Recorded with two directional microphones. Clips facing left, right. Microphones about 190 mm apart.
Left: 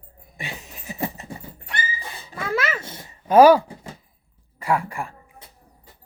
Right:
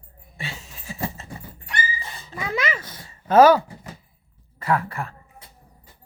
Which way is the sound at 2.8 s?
25° left (ahead or behind).